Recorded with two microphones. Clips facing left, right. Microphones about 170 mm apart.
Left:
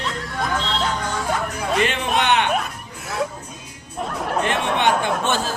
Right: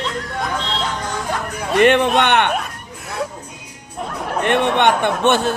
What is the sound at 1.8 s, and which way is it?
Speech, 60° right (ahead or behind).